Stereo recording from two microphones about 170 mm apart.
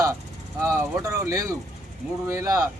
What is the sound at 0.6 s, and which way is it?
A man's voice, 15° right (ahead or behind).